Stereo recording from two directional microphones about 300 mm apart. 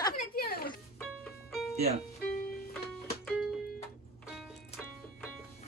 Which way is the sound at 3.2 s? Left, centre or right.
Centre.